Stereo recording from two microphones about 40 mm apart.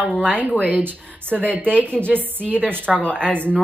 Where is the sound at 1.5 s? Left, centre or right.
Left.